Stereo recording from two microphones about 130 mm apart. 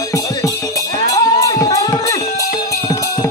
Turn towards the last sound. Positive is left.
turn(degrees=25)  # may be behind; listen again after turning